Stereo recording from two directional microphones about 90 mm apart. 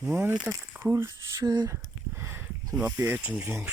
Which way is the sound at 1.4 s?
45° right (ahead or behind).